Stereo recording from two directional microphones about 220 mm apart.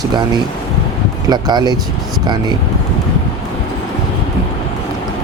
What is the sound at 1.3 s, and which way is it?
Speech, 20° right (ahead or behind).